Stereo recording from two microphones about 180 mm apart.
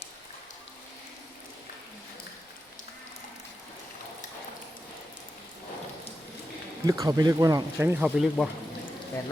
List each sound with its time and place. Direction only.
6.8 s speech: 20° right (ahead or behind)